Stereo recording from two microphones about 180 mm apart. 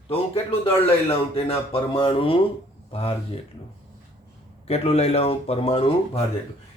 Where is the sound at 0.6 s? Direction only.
30° left (ahead or behind).